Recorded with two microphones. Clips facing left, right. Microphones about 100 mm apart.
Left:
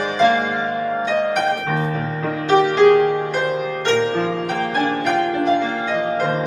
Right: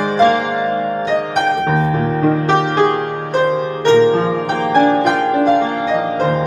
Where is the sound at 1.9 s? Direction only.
45° right (ahead or behind).